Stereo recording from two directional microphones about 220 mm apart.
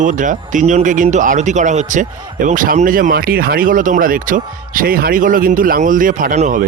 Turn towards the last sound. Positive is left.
turn(degrees=-35)  # may be behind; listen again after turning